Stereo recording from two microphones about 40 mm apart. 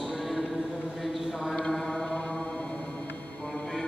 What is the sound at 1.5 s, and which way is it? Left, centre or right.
Mantra, centre.